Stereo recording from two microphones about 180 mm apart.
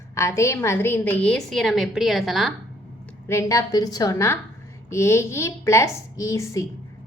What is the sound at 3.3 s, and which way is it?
A woman's voice, 15° left (ahead or behind).